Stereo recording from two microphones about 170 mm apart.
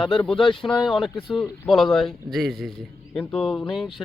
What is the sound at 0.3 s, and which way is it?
Speech, 30° left (ahead or behind).